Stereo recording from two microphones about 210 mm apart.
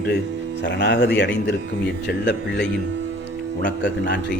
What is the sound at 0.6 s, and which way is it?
Speech, 55° left (ahead or behind).